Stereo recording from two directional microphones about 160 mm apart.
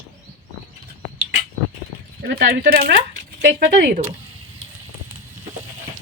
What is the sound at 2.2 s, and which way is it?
Speech, 80° right.